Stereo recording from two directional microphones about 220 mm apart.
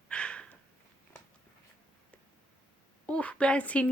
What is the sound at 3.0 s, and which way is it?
Speech, 5° left (ahead or behind).